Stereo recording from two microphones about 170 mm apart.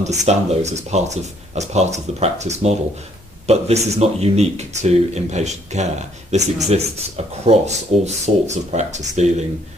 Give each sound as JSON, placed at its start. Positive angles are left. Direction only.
{"t": 0.0, "sound": "speech", "side_deg": -45}